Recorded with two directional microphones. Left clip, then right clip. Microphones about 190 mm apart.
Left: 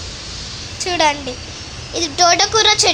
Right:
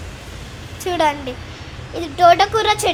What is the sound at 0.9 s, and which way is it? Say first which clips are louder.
Speech: left 2 dB; 10° right (ahead or behind).